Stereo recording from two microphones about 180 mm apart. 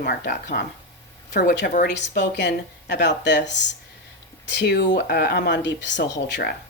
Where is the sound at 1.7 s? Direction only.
60° left (ahead or behind).